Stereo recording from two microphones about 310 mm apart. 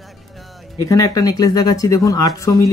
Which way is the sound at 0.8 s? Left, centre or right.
Centre.